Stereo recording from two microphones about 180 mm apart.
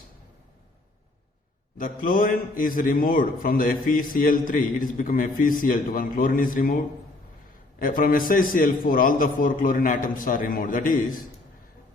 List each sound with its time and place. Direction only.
1.8 s a man's voice: 50° left (ahead or behind)